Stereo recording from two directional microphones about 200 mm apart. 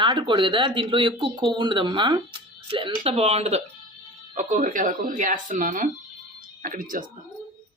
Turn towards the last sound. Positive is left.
turn(degrees=-45)  # may be behind; listen again after turning